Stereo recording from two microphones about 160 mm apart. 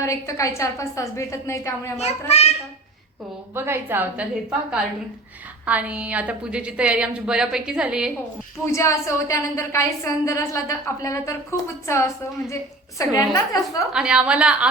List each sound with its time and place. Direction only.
0.0 s a woman's voice: 20° left (ahead or behind)
2.3 s a child's voice: 40° left (ahead or behind)
3.5 s a woman's voice: 15° right (ahead or behind)
8.6 s a woman's voice: 20° left (ahead or behind)
13.9 s a woman's voice: 5° right (ahead or behind)